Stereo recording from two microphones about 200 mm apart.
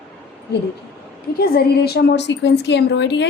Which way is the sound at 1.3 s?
50° left (ahead or behind).